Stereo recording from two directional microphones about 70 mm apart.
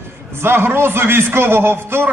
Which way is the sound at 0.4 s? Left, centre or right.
Right.